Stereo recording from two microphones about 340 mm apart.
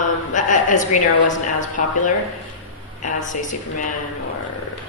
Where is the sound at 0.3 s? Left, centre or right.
Left.